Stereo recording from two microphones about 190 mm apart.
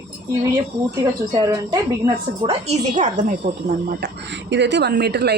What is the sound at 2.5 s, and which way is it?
Speech, 35° right (ahead or behind).